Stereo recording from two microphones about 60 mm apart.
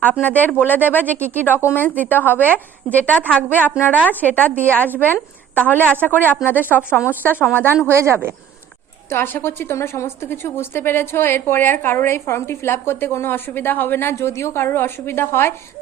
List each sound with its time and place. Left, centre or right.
0.0 s a woman's voice: left
7.9 s speech: right
9.0 s a woman's voice: left
14.2 s a woman's voice: left